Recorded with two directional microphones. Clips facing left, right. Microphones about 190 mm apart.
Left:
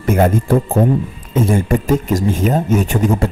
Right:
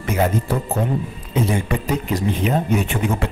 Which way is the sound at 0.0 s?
50° left (ahead or behind).